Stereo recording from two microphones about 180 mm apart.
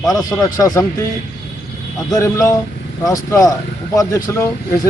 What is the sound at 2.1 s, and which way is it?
Speech, 20° left (ahead or behind).